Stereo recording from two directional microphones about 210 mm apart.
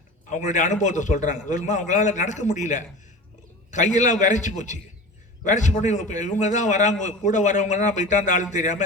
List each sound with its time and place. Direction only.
0.3 s a man's voice: 35° left (ahead or behind)